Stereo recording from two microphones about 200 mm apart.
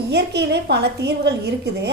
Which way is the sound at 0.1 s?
55° right (ahead or behind).